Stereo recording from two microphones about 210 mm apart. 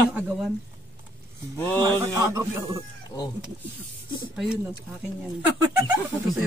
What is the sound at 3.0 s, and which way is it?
Speech, 20° left (ahead or behind).